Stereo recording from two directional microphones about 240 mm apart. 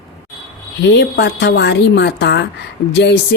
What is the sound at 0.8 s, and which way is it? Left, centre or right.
Speech, left.